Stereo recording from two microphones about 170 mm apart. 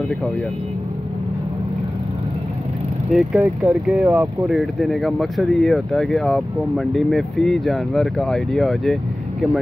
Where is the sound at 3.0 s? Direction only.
5° right (ahead or behind).